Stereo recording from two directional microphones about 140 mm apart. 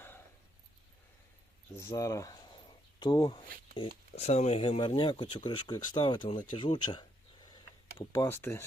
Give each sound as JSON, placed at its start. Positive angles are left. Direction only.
{"t": 1.7, "sound": "speech", "side_deg": 20}
{"t": 3.0, "sound": "speech", "side_deg": 30}
{"t": 3.8, "sound": "speech", "side_deg": 45}
{"t": 7.4, "sound": "a sound", "side_deg": 30}